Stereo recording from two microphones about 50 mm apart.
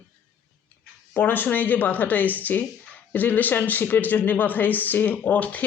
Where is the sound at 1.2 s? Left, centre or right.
Left.